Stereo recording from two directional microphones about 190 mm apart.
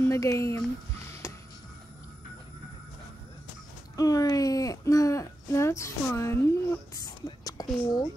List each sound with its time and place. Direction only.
0.1 s speech: 15° left (ahead or behind)
1.2 s music: 15° left (ahead or behind)
3.9 s speech: 20° left (ahead or behind)